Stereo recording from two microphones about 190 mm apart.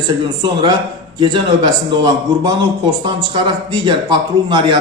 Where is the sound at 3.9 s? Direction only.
25° right (ahead or behind).